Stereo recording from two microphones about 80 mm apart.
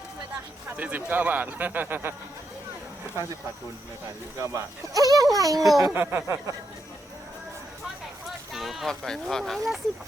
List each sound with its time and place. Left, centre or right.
0.8 s speech: centre
4.4 s speech: right
5.9 s speech: right
8.5 s speech: centre